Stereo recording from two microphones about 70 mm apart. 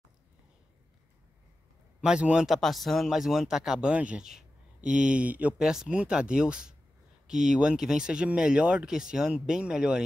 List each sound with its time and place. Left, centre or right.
2.0 s a man's voice: centre
2.4 s speech: centre
3.9 s speech: centre
4.2 s speech: centre
5.6 s speech: centre